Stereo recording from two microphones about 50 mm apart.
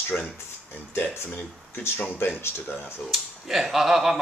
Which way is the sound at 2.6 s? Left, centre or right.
Left.